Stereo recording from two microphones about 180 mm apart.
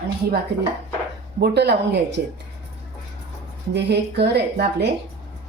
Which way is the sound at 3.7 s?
70° right (ahead or behind).